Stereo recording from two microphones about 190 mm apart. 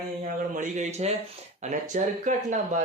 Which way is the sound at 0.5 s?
40° right (ahead or behind).